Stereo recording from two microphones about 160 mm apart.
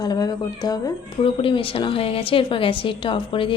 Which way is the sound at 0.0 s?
25° left (ahead or behind).